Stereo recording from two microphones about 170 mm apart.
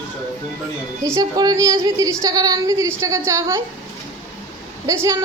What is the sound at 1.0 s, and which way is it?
A woman's voice, 20° right (ahead or behind).